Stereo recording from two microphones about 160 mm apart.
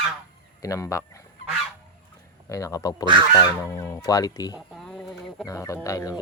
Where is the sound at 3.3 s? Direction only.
25° left (ahead or behind).